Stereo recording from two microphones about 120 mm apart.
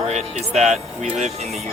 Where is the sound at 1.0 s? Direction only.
75° right (ahead or behind).